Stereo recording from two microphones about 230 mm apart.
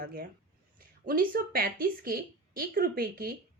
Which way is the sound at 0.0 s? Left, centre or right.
Right.